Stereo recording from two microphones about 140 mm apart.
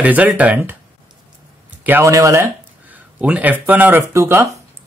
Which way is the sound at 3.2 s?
10° right (ahead or behind).